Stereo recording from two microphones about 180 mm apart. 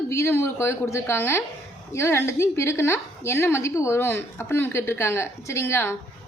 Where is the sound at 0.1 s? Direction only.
15° left (ahead or behind).